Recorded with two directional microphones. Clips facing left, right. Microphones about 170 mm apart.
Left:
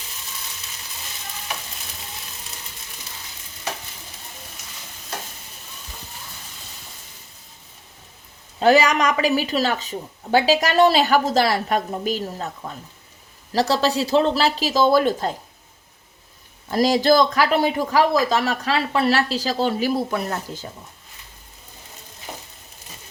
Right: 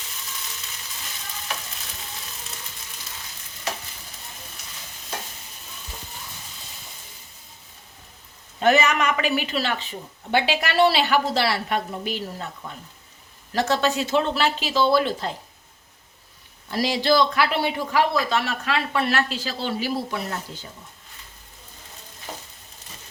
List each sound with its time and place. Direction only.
8.5 s a man's voice: 35° left (ahead or behind)
13.5 s a man's voice: 35° left (ahead or behind)
16.6 s a man's voice: 45° left (ahead or behind)